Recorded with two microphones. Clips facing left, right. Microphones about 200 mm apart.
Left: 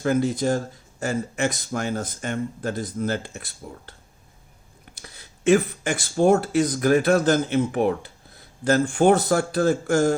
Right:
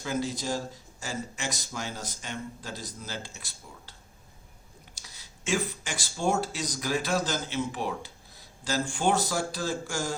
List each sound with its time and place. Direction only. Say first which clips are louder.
0.0 s speech: left 10 dB; 55° left (ahead or behind)
4.9 s speech: left 7 dB; 55° left (ahead or behind)